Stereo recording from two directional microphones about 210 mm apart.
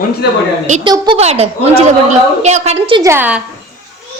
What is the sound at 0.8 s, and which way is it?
A woman's voice, 20° right (ahead or behind).